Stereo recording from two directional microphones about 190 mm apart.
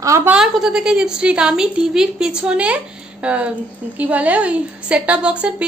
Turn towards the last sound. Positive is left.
turn(degrees=-5)  # may be behind; listen again after turning